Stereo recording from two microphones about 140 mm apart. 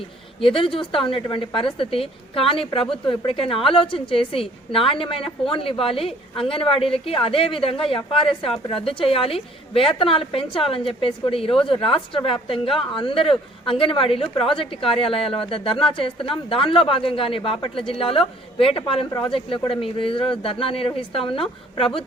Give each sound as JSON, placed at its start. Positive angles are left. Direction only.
{"t": 0.4, "sound": "a woman's voice", "side_deg": 40}